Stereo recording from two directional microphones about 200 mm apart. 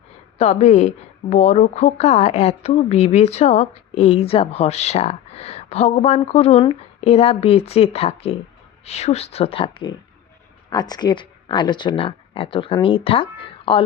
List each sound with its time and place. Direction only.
0.3 s a woman's voice: 30° left (ahead or behind)